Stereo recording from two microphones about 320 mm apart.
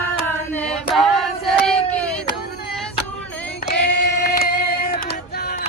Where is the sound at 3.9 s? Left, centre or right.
Left.